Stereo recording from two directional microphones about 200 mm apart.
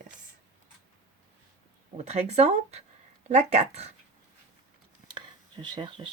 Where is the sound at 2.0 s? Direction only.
35° right (ahead or behind).